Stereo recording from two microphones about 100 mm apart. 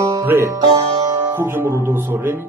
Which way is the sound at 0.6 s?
65° right (ahead or behind).